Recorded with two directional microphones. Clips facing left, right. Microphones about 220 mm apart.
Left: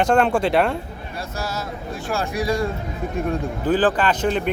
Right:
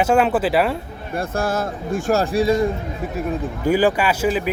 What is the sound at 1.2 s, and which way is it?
Speech, 50° right (ahead or behind).